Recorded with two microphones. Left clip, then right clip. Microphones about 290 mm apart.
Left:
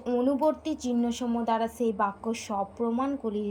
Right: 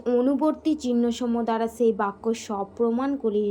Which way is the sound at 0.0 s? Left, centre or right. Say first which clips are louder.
Right 3 dB; centre.